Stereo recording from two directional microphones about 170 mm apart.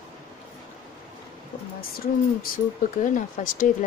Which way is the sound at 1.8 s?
60° left (ahead or behind).